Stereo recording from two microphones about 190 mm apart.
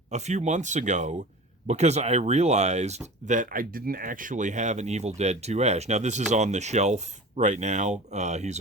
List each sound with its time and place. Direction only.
0.1 s speech: 35° right (ahead or behind)